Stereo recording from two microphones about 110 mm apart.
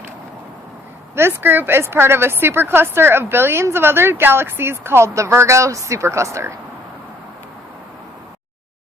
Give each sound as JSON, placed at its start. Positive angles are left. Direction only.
{"t": 1.1, "sound": "a woman's voice", "side_deg": -20}